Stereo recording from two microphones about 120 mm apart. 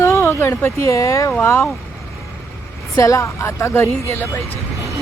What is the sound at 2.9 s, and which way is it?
A woman's voice, 30° left (ahead or behind).